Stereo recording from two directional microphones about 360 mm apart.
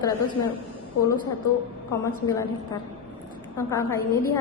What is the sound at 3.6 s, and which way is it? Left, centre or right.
Speech, centre.